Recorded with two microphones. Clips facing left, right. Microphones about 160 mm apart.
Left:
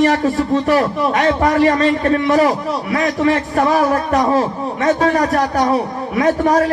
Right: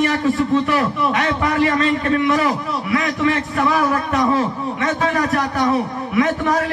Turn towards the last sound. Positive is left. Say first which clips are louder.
# left 3 dB
turn(degrees=40)  # may be behind; listen again after turning